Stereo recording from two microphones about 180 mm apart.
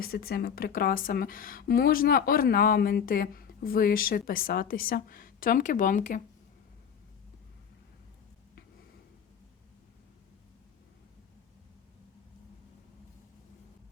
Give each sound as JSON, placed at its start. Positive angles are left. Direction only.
{"t": 0.0, "sound": "speech", "side_deg": 55}